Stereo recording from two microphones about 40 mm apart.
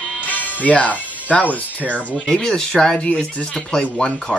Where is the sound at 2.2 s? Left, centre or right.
Centre.